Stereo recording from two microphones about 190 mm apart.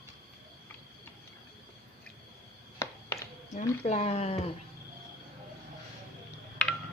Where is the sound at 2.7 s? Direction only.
15° left (ahead or behind).